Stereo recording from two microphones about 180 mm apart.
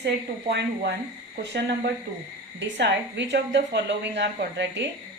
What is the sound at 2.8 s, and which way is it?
A woman's voice, 75° right (ahead or behind).